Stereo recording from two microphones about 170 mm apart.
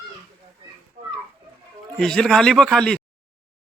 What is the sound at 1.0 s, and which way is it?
Children playing, 50° right (ahead or behind).